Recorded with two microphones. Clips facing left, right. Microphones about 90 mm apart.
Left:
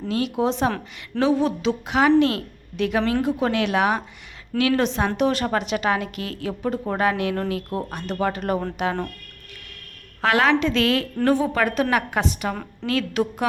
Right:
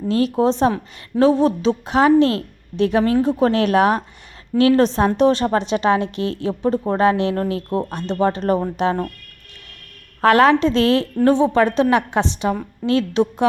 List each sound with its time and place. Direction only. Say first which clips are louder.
0.1 s a woman's voice: right 5 dB; 35° right (ahead or behind)
10.2 s a woman's voice: right 6 dB; 40° right (ahead or behind)